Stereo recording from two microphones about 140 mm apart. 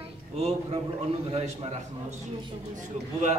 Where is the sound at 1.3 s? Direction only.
45° right (ahead or behind).